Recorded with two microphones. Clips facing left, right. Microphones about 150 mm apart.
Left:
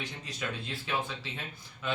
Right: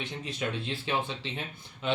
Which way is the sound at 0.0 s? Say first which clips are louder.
Right 4 dB; 25° right (ahead or behind).